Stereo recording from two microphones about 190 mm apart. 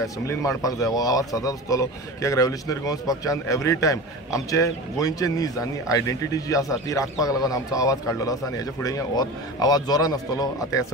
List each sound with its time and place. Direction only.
0.0 s speech: 15° left (ahead or behind)